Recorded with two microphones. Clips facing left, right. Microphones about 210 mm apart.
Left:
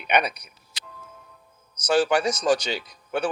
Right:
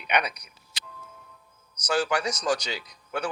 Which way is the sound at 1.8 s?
30° left (ahead or behind).